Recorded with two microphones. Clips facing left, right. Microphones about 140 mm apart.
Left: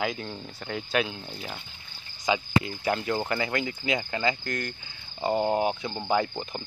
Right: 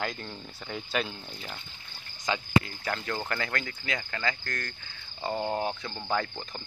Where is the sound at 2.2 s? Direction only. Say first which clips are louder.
Left 1 dB; 15° left (ahead or behind).